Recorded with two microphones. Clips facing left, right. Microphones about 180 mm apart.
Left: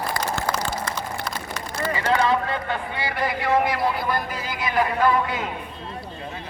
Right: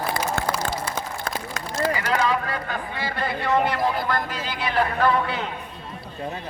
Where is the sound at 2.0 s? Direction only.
25° left (ahead or behind).